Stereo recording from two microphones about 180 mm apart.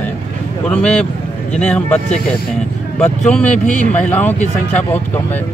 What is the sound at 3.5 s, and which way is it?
Speech, 45° left (ahead or behind).